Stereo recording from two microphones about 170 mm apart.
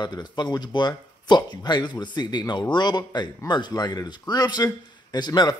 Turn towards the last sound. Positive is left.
turn(degrees=25)  # may be behind; listen again after turning